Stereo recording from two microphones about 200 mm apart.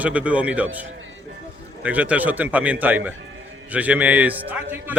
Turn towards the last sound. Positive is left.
turn(degrees=-10)  # may be behind; listen again after turning